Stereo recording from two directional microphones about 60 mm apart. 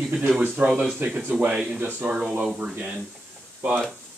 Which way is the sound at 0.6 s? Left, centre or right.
Right.